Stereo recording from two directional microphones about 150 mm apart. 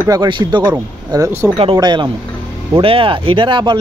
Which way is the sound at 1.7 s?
30° right (ahead or behind).